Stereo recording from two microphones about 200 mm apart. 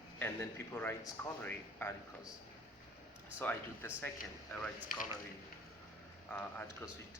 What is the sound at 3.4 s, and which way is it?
Speech, 10° left (ahead or behind).